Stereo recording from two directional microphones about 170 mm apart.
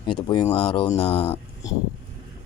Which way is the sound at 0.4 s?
35° left (ahead or behind).